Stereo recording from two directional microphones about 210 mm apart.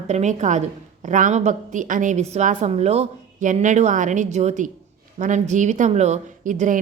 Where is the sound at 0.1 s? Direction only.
35° right (ahead or behind).